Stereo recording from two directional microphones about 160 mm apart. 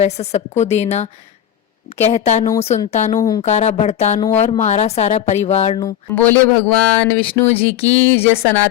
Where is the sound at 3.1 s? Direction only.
25° left (ahead or behind).